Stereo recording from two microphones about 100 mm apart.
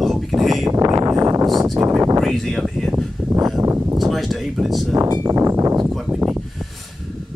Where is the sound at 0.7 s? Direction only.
35° right (ahead or behind).